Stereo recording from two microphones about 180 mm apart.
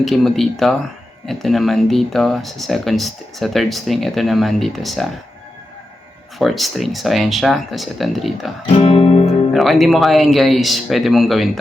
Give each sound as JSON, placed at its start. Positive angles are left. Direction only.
{"t": 0.0, "sound": "speech", "side_deg": 0}
{"t": 6.4, "sound": "speech", "side_deg": 0}
{"t": 8.6, "sound": "music", "side_deg": 30}
{"t": 9.5, "sound": "speech", "side_deg": 0}